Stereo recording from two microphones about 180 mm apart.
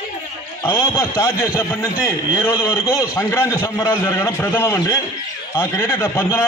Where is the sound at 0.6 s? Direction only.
15° left (ahead or behind).